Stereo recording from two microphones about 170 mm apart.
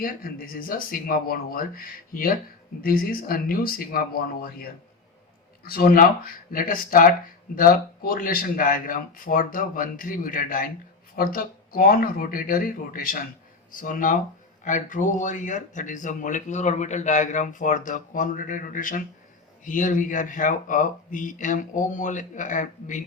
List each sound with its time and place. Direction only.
0.0 s speech: 55° left (ahead or behind)